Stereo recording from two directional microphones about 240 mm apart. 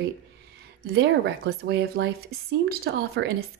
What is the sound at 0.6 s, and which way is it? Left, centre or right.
A woman's voice, right.